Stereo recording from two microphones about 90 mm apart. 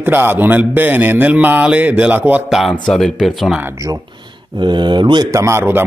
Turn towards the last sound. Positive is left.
turn(degrees=-25)  # may be behind; listen again after turning